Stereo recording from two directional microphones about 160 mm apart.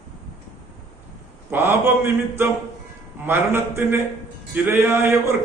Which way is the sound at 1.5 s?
15° right (ahead or behind).